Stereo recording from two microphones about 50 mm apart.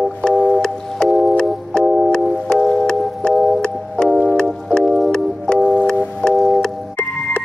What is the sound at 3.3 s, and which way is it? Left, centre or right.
Music, centre.